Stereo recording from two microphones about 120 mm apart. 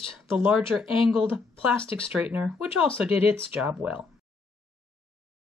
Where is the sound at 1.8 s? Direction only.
45° left (ahead or behind).